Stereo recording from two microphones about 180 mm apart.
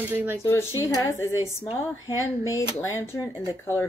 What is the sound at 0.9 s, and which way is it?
Speech, 20° left (ahead or behind).